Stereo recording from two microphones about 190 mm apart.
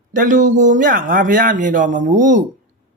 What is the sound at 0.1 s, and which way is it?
Speech, 45° right (ahead or behind).